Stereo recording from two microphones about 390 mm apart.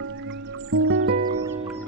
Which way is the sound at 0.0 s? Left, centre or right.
Right.